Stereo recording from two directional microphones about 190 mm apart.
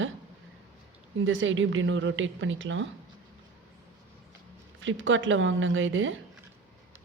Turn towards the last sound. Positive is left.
turn(degrees=-85)